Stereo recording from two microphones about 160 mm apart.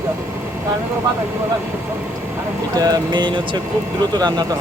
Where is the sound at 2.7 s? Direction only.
25° right (ahead or behind).